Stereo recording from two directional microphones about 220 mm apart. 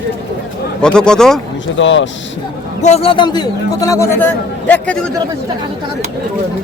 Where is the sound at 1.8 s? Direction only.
55° left (ahead or behind).